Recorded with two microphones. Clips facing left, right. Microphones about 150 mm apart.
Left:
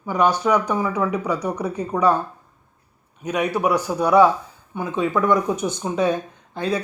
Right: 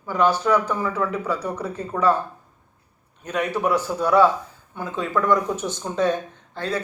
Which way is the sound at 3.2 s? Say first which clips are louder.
Left 2 dB; 10° left (ahead or behind).